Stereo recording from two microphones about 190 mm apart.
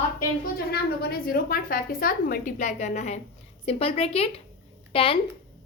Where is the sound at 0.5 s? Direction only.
55° left (ahead or behind).